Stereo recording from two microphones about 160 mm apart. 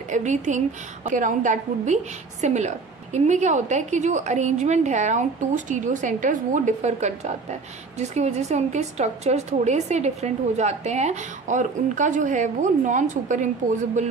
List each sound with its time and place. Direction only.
0.1 s a woman's voice: 50° right (ahead or behind)